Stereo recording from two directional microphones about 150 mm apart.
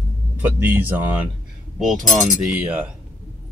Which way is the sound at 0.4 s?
10° right (ahead or behind).